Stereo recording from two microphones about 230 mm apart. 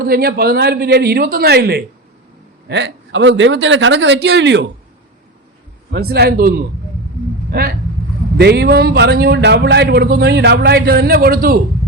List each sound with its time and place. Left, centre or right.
0.0 s a man's voice: right
5.9 s a man's voice: right